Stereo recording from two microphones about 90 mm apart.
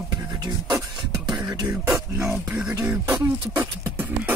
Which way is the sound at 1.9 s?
30° right (ahead or behind).